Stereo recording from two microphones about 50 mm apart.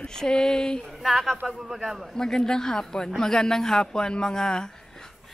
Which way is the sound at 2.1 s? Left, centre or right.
Centre.